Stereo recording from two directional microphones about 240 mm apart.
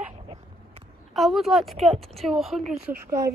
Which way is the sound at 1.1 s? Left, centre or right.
Centre.